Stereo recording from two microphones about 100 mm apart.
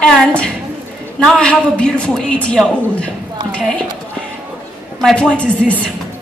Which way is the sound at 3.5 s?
10° left (ahead or behind).